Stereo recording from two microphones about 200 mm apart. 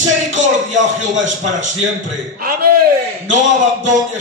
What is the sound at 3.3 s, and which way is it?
Speech, 40° right (ahead or behind).